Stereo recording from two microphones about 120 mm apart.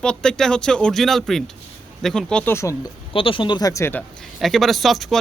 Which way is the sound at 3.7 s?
25° left (ahead or behind).